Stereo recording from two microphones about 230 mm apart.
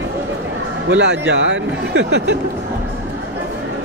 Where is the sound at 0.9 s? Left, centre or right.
Right.